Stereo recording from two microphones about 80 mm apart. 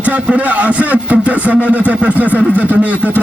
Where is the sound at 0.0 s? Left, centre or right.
Centre.